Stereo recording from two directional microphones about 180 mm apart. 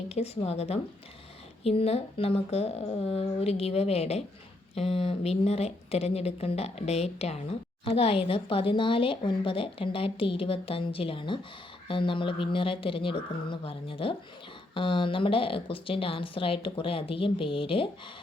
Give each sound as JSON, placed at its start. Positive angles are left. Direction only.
{"t": 0.1, "sound": "a woman's voice", "side_deg": 35}